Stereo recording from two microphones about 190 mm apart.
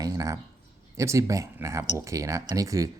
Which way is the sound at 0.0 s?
20° right (ahead or behind).